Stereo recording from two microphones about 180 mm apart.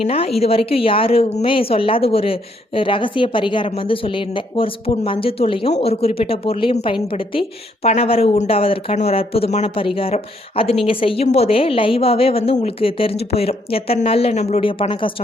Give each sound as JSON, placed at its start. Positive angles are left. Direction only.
{"t": 0.0, "sound": "a woman's voice", "side_deg": 35}